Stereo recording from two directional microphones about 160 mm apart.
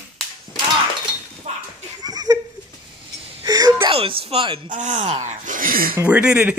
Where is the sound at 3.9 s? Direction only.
35° right (ahead or behind).